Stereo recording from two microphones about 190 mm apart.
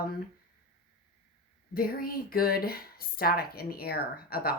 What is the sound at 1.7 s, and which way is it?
Speech, 50° left (ahead or behind).